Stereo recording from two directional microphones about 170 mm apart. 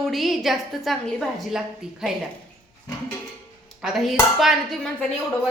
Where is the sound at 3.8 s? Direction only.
Centre (ahead or behind).